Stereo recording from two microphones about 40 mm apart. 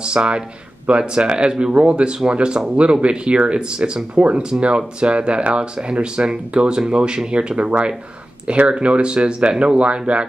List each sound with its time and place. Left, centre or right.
0.0 s speech: right